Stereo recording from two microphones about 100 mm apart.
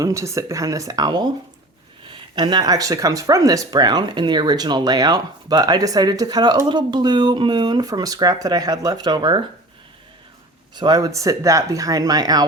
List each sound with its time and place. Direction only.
0.0 s speech: 30° right (ahead or behind); by 9.4 s 50° right (ahead or behind)
10.8 s speech: 40° right (ahead or behind)